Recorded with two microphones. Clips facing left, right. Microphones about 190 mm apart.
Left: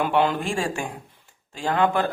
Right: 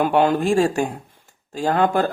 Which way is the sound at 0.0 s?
45° right (ahead or behind).